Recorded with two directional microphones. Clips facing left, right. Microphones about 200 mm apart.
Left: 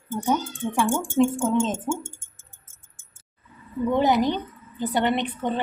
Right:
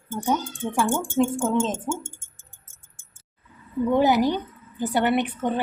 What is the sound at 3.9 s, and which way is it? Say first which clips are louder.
A woman's voice: right 1 dB; 10° right (ahead or behind).